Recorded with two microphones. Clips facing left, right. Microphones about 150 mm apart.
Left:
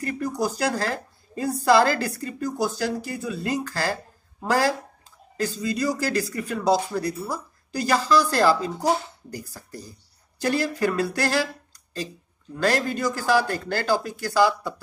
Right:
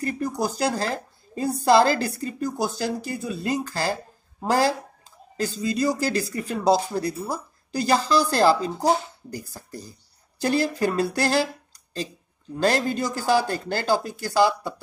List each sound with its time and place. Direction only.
0.0 s speech: 25° right (ahead or behind)
12.5 s speech: 25° right (ahead or behind)